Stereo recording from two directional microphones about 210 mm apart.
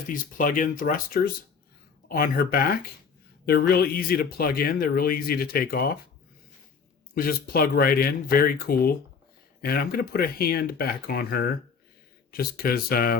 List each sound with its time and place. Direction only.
0.1 s speech: 40° left (ahead or behind)
7.1 s speech: 45° left (ahead or behind)